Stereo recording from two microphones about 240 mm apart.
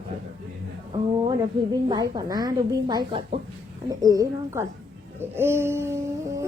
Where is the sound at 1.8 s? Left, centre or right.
Centre.